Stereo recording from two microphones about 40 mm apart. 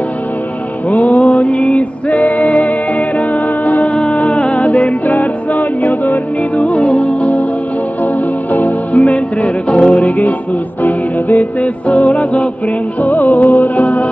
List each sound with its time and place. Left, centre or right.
0.8 s music: left
3.9 s music: left
8.0 s music: left